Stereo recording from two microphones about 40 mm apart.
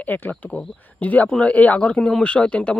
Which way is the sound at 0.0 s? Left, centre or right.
Left.